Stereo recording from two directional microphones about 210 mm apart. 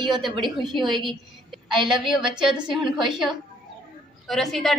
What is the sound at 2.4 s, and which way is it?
A woman's voice, 5° right (ahead or behind).